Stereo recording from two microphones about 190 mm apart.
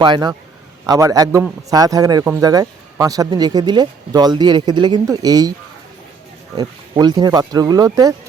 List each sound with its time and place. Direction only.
0.0 s speech: 25° right (ahead or behind)
6.6 s speech: 20° right (ahead or behind)